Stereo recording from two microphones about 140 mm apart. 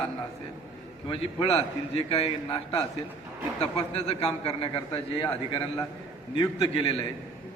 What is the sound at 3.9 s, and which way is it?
A man's voice, 45° left (ahead or behind).